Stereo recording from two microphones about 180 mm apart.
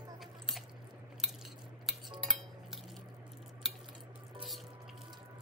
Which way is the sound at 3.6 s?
Centre (ahead or behind).